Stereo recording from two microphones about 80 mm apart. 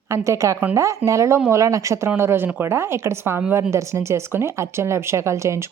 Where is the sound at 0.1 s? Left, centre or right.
Right.